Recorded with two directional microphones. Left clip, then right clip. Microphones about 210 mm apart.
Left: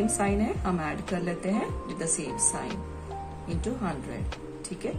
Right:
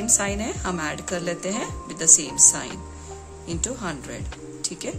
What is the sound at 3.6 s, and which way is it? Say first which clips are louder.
Speech: right 2 dB; 45° right (ahead or behind).